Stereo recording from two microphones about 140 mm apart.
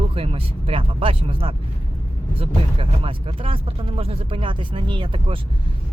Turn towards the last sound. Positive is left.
turn(degrees=-40)  # may be behind; listen again after turning